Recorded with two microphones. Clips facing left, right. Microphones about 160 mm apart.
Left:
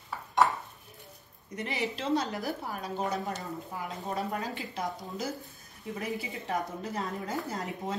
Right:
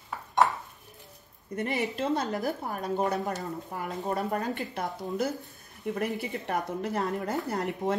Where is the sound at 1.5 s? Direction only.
55° right (ahead or behind).